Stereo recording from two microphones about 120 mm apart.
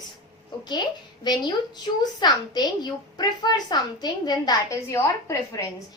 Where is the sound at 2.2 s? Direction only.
35° left (ahead or behind).